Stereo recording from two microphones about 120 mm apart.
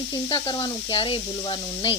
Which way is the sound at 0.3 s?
45° left (ahead or behind).